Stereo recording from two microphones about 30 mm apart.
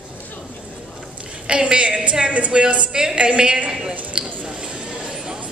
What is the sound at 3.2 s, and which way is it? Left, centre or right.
Speech, right.